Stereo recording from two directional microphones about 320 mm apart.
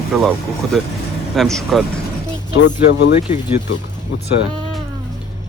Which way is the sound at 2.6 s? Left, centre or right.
Left.